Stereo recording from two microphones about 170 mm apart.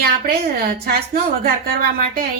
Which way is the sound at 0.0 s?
60° right (ahead or behind).